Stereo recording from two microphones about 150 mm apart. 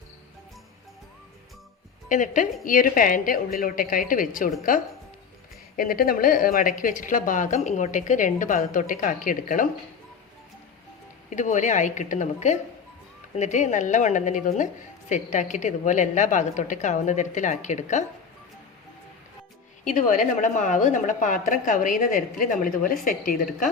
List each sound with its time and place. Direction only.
2.0 s speech: 60° left (ahead or behind)
5.7 s speech: 70° left (ahead or behind)
11.3 s speech: 55° left (ahead or behind)
19.8 s speech: 60° left (ahead or behind)